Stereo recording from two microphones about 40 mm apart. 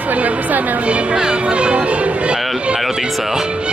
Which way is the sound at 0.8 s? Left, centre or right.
Right.